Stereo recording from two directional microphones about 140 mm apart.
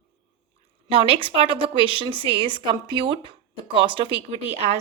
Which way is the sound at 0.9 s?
40° right (ahead or behind).